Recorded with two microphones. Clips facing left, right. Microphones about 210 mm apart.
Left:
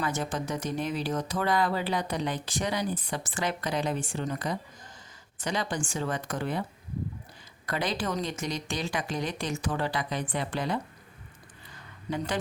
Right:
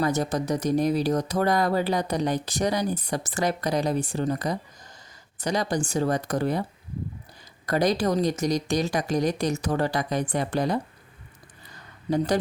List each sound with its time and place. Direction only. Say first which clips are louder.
0.0 s speech: right 6 dB; 40° right (ahead or behind)
7.7 s speech: right 8 dB; 40° right (ahead or behind)
12.1 s speech: right 8 dB; 40° right (ahead or behind)